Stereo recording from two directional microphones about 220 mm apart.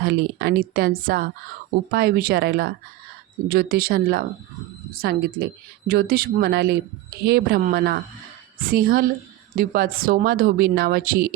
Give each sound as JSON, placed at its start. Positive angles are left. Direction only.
{"t": 0.0, "sound": "a woman's voice", "side_deg": -45}